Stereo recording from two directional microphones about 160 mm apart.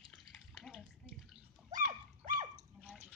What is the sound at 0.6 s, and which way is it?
Bathtub, 5° right (ahead or behind).